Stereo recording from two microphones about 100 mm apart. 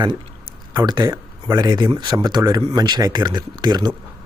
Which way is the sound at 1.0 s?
35° right (ahead or behind).